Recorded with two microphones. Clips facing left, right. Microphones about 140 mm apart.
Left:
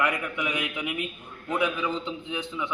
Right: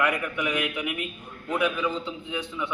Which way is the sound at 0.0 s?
20° left (ahead or behind).